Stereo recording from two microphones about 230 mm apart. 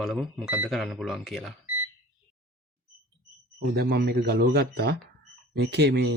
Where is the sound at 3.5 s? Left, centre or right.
Right.